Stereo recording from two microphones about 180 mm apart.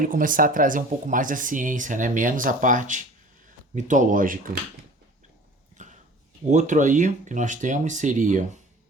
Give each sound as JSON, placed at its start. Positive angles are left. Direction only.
{"t": 0.0, "sound": "speech", "side_deg": -50}
{"t": 5.7, "sound": "a sound", "side_deg": -40}
{"t": 6.5, "sound": "speech", "side_deg": -45}